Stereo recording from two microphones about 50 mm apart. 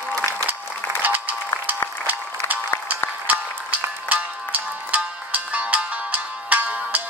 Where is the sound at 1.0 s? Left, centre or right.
Right.